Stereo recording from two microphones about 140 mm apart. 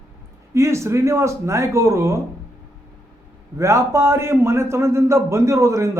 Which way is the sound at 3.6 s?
20° right (ahead or behind).